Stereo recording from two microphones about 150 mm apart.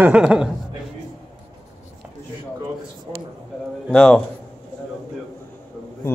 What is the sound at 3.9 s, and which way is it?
Speech, 5° left (ahead or behind).